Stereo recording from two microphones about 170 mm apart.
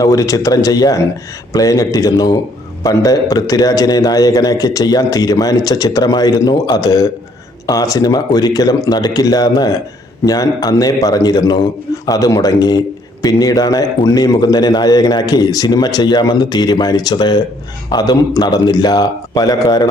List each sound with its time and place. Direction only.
0.0 s a man's voice: 20° left (ahead or behind)